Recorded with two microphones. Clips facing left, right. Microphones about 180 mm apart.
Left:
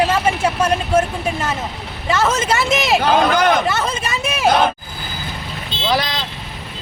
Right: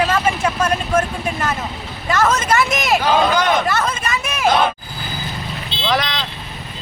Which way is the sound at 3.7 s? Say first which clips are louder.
Even; 25° left (ahead or behind).